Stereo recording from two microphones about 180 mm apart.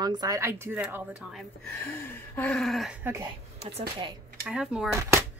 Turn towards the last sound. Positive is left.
turn(degrees=-15)  # may be behind; listen again after turning